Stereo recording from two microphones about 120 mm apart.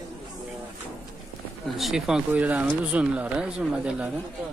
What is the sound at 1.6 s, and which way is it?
Speech, centre (ahead or behind).